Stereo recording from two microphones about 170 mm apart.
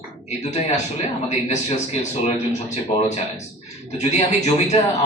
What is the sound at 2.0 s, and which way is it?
Speech, 45° left (ahead or behind).